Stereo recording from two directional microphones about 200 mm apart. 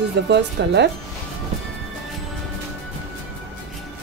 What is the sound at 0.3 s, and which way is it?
Speech, 60° right (ahead or behind).